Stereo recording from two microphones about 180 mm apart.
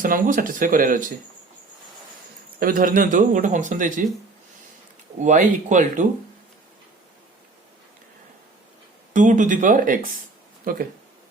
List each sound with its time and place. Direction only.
0.0 s speech: 50° right (ahead or behind)
2.6 s speech: 50° right (ahead or behind)
5.2 s speech: 45° right (ahead or behind)
9.1 s speech: 45° right (ahead or behind)